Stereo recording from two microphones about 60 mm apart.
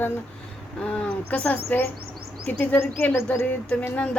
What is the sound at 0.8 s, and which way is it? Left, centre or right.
Speech, centre.